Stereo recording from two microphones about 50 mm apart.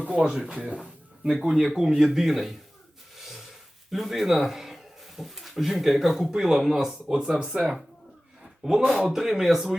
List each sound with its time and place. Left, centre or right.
0.0 s speech: centre
0.7 s a sound: centre
1.4 s speech: centre
3.2 s snort: centre
3.9 s speech: centre
9.0 s speech: centre